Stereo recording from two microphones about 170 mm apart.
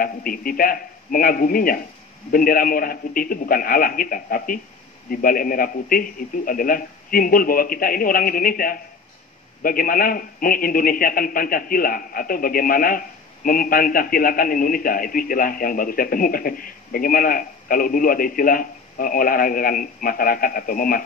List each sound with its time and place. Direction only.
0.0 s a man's voice: 55° left (ahead or behind)